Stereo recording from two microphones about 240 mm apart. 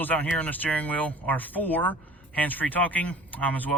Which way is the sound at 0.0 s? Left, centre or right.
Centre.